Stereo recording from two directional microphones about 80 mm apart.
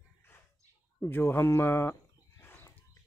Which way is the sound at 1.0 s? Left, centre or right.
Left.